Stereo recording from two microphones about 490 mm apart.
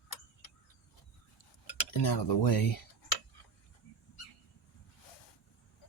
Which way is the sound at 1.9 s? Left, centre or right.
Left.